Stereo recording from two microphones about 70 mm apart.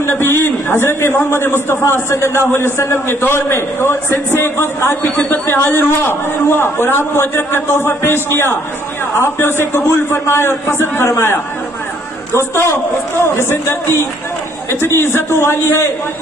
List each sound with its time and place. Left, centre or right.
0.0 s a man's voice: left
5.1 s a man's voice: left
12.7 s a man's voice: left
15.0 s a man's voice: left